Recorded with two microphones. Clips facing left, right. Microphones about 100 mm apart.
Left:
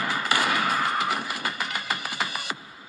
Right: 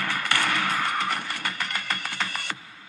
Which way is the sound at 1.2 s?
5° left (ahead or behind).